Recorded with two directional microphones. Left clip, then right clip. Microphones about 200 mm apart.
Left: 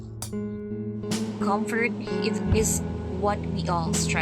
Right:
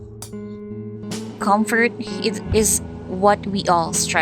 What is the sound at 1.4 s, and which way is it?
Speech, 35° right (ahead or behind).